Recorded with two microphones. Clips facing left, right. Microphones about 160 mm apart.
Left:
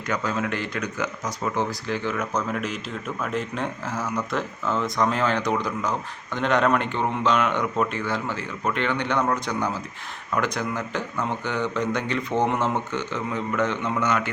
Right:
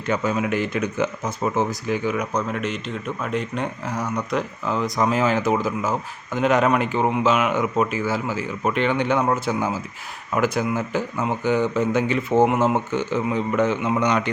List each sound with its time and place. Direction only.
0.1 s speech: 20° right (ahead or behind)
2.5 s speech: 5° left (ahead or behind); by 14.3 s 20° right (ahead or behind)